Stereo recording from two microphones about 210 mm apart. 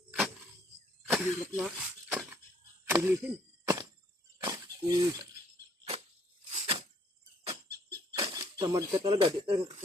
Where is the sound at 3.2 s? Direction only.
5° right (ahead or behind).